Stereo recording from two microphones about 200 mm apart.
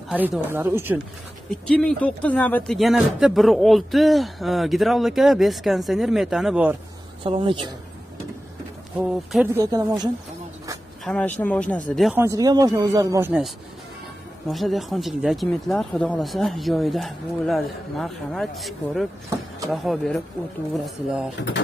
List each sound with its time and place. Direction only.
0.2 s speech: 10° right (ahead or behind)
1.5 s speech: 5° left (ahead or behind)
7.2 s speech: 25° right (ahead or behind)
8.9 s speech: 5° right (ahead or behind)
11.1 s speech: 5° left (ahead or behind)
12.2 s speech: 15° right (ahead or behind)
14.5 s speech: centre (ahead or behind)